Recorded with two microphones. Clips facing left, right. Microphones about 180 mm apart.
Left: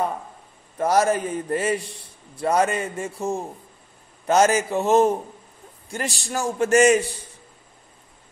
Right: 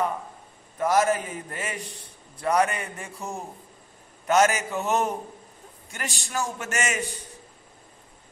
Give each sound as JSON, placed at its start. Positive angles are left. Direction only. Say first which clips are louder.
{"t": 0.7, "sound": "a man's voice", "louder": "left 3 dB", "side_deg": 35}
{"t": 4.3, "sound": "a man's voice", "louder": "left 3 dB", "side_deg": 30}